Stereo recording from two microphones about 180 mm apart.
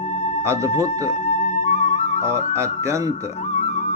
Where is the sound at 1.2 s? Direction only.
45° left (ahead or behind).